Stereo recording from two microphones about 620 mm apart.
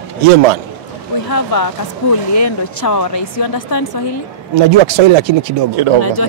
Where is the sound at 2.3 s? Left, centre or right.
Left.